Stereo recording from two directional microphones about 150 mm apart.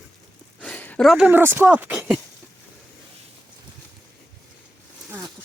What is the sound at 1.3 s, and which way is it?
Speech, 15° right (ahead or behind).